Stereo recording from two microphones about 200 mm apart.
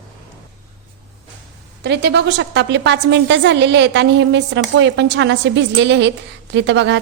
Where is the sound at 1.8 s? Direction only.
55° right (ahead or behind).